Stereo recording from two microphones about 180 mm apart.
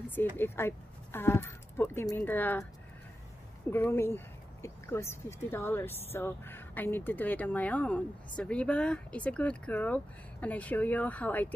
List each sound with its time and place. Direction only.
0.1 s speech: 10° left (ahead or behind)
3.7 s speech: 10° left (ahead or behind)